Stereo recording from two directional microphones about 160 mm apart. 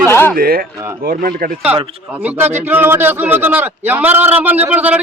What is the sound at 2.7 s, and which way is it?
A man's voice, 15° right (ahead or behind).